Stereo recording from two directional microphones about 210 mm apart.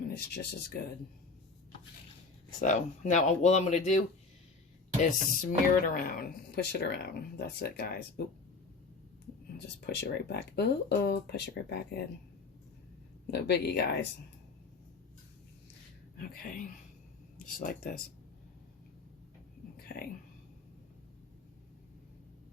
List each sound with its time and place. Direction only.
0.0 s speech: 45° left (ahead or behind)
2.6 s speech: 35° left (ahead or behind)
5.5 s speech: 45° left (ahead or behind)
9.8 s speech: 50° left (ahead or behind)
13.3 s speech: 50° left (ahead or behind)
16.1 s speech: 45° left (ahead or behind)
19.7 s whispering: 45° left (ahead or behind)